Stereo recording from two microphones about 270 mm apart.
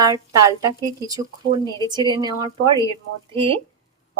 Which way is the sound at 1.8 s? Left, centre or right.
Centre.